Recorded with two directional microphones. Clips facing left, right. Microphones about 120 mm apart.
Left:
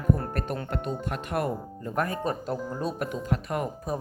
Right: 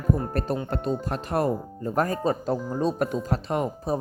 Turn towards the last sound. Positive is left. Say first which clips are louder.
# right 4 dB
turn(degrees=-25)  # may be behind; listen again after turning